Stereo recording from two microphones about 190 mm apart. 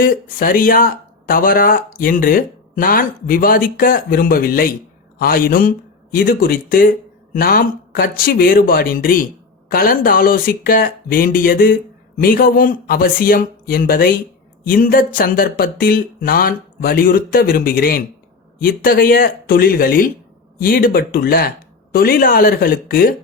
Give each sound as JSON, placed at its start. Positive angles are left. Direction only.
{"t": 0.0, "sound": "speech", "side_deg": 45}